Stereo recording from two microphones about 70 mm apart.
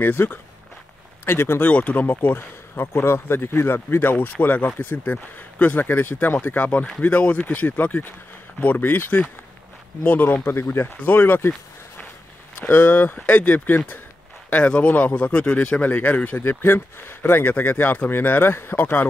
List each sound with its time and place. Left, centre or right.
0.0 s speech: left
1.7 s speech: left
12.5 s speech: left
15.8 s speech: left